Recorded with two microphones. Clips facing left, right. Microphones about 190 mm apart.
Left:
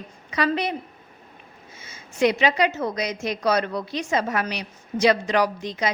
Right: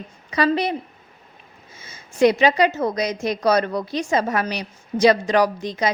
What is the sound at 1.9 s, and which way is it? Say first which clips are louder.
A woman's voice: right 4 dB; 40° right (ahead or behind).